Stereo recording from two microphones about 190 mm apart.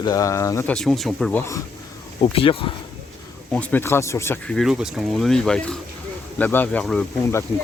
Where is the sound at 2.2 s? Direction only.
30° left (ahead or behind).